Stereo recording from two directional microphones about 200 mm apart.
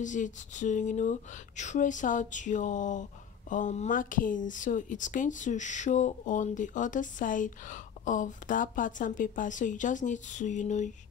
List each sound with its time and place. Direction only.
0.0 s speech: 40° left (ahead or behind)